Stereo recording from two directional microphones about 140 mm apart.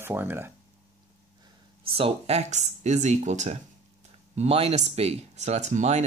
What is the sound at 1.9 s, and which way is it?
Speech, 40° right (ahead or behind).